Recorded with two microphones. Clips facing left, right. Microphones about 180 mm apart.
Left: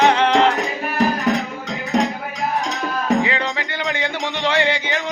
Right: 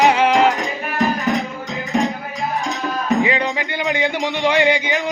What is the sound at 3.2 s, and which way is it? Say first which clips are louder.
Music: right 3 dB; 15° right (ahead or behind).